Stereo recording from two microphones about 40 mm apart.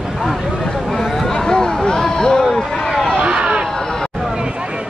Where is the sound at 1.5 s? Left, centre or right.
Centre.